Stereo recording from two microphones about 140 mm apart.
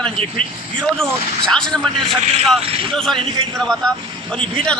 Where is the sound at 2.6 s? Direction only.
40° right (ahead or behind).